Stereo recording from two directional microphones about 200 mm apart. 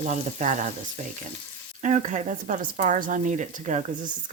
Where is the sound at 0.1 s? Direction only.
40° right (ahead or behind).